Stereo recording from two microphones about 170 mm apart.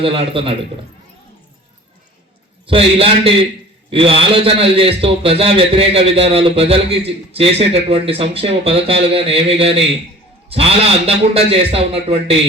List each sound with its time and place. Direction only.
0.0 s a man's voice: 30° right (ahead or behind)
2.6 s a man's voice: 35° right (ahead or behind)